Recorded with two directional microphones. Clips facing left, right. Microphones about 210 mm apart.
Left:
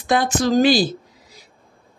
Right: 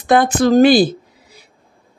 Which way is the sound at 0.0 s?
55° right (ahead or behind).